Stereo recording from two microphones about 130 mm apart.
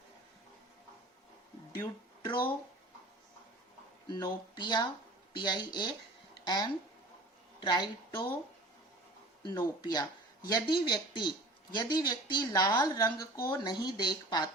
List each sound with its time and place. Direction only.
2.2 s speech: 35° left (ahead or behind)
4.1 s speech: 35° left (ahead or behind)
9.4 s speech: 30° left (ahead or behind)